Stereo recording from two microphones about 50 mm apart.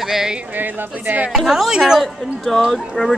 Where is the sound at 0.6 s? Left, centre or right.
Right.